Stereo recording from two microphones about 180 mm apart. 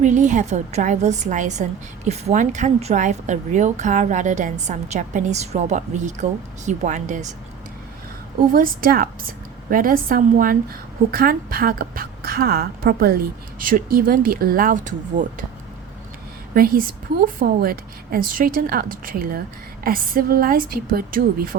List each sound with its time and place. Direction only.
0.0 s a woman's voice: 45° right (ahead or behind)
8.5 s a woman's voice: 55° right (ahead or behind)
16.6 s a woman's voice: 55° right (ahead or behind)